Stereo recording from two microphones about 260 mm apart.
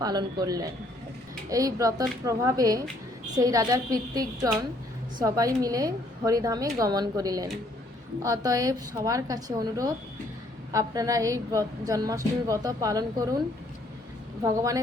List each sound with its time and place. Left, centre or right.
0.0 s a woman's voice: centre
14.4 s a woman's voice: centre